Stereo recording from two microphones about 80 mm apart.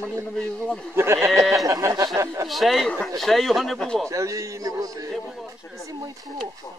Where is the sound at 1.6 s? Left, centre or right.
Right.